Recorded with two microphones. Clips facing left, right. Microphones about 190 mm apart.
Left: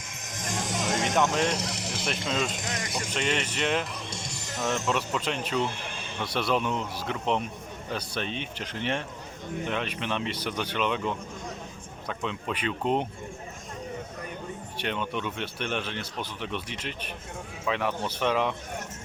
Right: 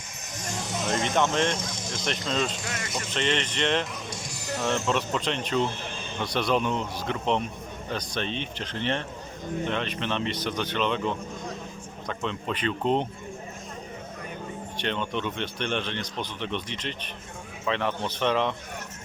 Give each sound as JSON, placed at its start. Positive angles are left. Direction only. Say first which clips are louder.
{"t": 0.5, "sound": "a sound", "louder": "left 1 dB", "side_deg": 90}
{"t": 1.1, "sound": "speech", "louder": "right 1 dB", "side_deg": 10}
{"t": 1.5, "sound": "speech", "louder": "left 1 dB", "side_deg": 75}
{"t": 1.9, "sound": "speech", "louder": "right 2 dB", "side_deg": 5}
{"t": 2.6, "sound": "speech", "louder": "even", "side_deg": 15}
{"t": 4.1, "sound": "music", "louder": "right 1 dB", "side_deg": 25}
{"t": 4.6, "sound": "speech", "louder": "right 1 dB", "side_deg": 5}
{"t": 14.8, "sound": "speech", "louder": "right 2 dB", "side_deg": 5}